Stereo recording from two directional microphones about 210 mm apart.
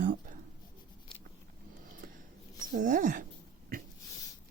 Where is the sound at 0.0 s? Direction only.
40° right (ahead or behind).